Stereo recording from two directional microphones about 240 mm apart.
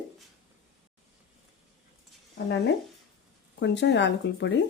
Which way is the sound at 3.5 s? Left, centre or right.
Left.